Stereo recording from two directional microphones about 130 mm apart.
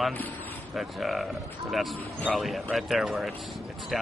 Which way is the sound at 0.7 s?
Centre (ahead or behind).